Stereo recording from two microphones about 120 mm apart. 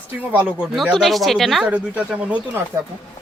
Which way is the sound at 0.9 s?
Centre (ahead or behind).